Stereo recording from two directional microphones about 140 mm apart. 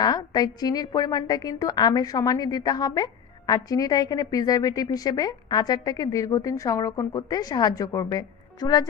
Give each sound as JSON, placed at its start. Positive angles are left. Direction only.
{"t": 0.0, "sound": "a woman's voice", "side_deg": 30}